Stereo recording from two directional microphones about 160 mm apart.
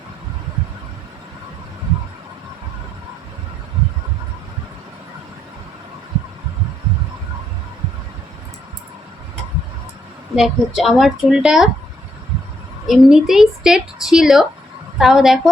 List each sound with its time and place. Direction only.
10.3 s a woman's voice: centre (ahead or behind)
12.9 s a woman's voice: 5° right (ahead or behind)